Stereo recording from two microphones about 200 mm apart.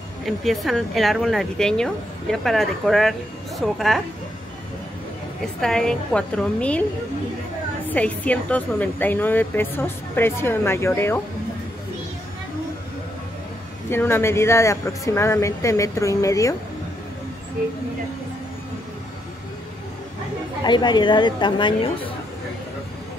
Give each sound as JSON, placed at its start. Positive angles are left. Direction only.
{"t": 0.2, "sound": "speech", "side_deg": 0}
{"t": 5.6, "sound": "a woman's voice", "side_deg": 0}
{"t": 13.8, "sound": "a woman's voice", "side_deg": 10}
{"t": 20.6, "sound": "a woman's voice", "side_deg": 20}